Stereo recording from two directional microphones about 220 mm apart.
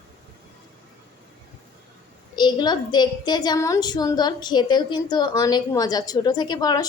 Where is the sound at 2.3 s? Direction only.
20° left (ahead or behind).